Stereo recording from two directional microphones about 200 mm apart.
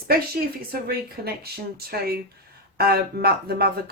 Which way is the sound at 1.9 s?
50° right (ahead or behind).